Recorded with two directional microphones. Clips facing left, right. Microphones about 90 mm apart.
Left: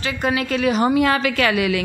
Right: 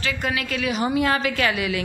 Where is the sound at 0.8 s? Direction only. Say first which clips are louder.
Left 4 dB; 70° left (ahead or behind).